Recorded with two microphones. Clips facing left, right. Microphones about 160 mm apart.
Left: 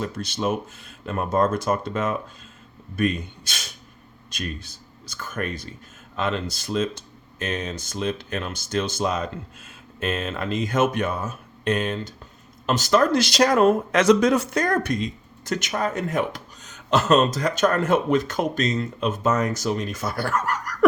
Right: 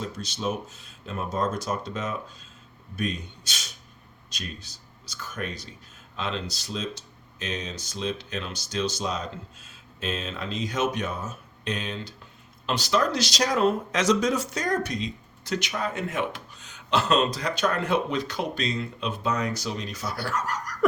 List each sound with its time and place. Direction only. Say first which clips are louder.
0.0 s speech: left 4 dB; 60° left (ahead or behind)